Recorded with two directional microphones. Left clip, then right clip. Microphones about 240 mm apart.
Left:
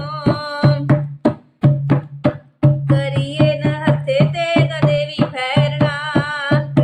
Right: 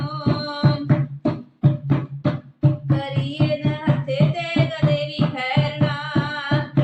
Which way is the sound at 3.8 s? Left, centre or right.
Left.